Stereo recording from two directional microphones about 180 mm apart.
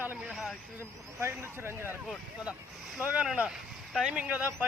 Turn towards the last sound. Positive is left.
turn(degrees=-5)  # may be behind; listen again after turning